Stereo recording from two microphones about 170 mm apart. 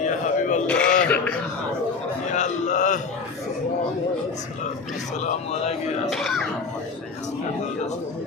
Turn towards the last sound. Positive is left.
turn(degrees=0)  # may be behind; listen again after turning